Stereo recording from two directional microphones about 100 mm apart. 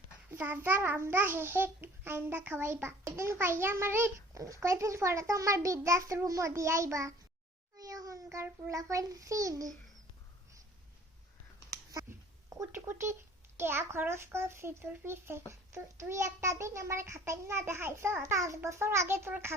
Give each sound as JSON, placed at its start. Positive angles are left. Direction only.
{"t": 0.3, "sound": "a child's voice", "side_deg": -15}
{"t": 12.1, "sound": "a sound", "side_deg": -25}
{"t": 12.7, "sound": "a child's voice", "side_deg": -25}